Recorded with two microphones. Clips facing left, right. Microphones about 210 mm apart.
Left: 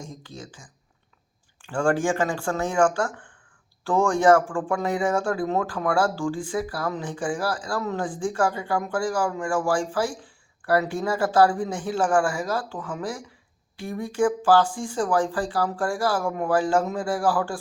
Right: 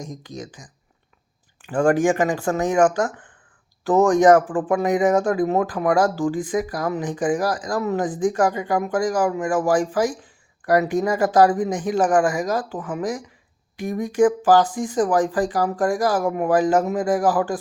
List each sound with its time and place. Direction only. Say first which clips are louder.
0.3 s speech: right 7 dB; 10° left (ahead or behind)
1.7 s speech: right 5 dB; 20° right (ahead or behind)